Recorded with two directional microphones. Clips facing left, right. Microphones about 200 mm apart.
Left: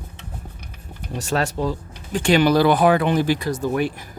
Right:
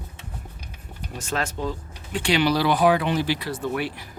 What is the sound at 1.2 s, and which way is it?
Speech, 40° left (ahead or behind).